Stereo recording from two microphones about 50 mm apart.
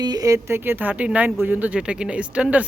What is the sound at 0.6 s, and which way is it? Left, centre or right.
Speech, right.